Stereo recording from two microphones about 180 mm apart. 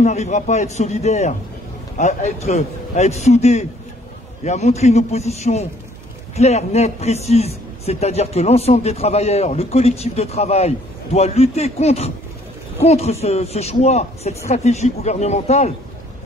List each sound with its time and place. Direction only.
0.0 s a man's voice: 40° left (ahead or behind)